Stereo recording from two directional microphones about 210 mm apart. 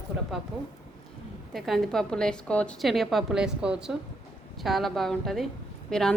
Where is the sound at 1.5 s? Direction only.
Centre (ahead or behind).